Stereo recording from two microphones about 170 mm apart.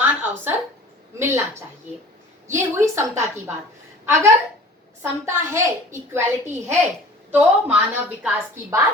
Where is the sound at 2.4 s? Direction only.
15° right (ahead or behind).